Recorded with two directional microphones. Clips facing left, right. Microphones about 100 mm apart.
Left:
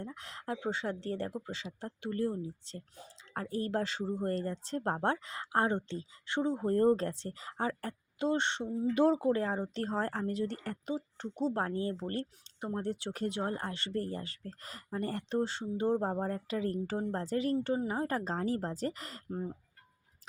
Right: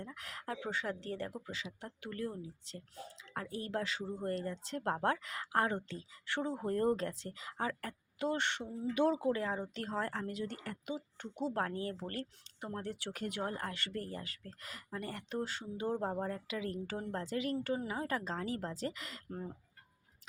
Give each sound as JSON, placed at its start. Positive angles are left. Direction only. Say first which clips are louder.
{"t": 0.0, "sound": "a woman's voice", "louder": "left 3 dB", "side_deg": 30}